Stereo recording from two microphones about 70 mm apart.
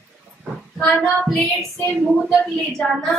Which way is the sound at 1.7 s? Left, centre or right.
Centre.